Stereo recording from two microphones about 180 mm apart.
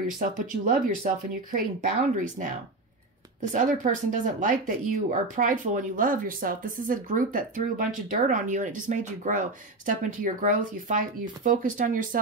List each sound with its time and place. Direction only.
0.2 s speech: 45° right (ahead or behind)
3.5 s speech: 45° right (ahead or behind)